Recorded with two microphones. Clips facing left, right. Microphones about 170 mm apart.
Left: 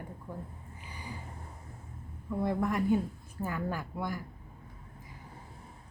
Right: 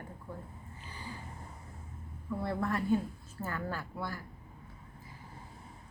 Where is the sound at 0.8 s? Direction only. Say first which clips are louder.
Left 1 dB; 15° left (ahead or behind).